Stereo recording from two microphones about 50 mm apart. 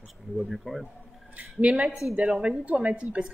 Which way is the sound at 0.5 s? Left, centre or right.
Centre.